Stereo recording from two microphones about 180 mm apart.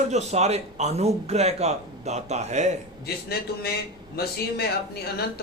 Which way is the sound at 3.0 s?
60° left (ahead or behind).